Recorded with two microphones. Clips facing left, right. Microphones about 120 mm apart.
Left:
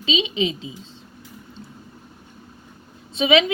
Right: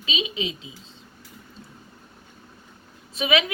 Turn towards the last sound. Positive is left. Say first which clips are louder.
# left 5 dB
turn(degrees=25)  # may be behind; listen again after turning